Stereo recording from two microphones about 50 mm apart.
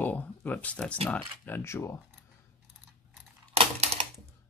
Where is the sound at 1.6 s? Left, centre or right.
Left.